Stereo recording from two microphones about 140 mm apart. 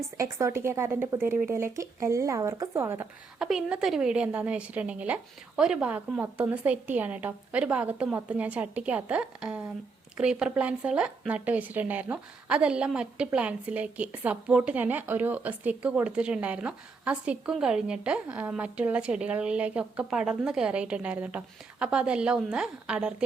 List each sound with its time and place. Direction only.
0.2 s speech: 20° right (ahead or behind)
3.3 s speech: 5° right (ahead or behind)